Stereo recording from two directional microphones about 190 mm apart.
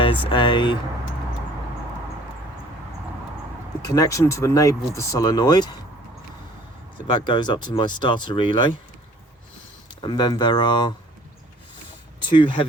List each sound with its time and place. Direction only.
0.3 s speech: 25° left (ahead or behind)
3.8 s speech: 20° left (ahead or behind)
7.1 s speech: 25° left (ahead or behind)
10.0 s speech: 20° left (ahead or behind)
12.2 s speech: 25° left (ahead or behind)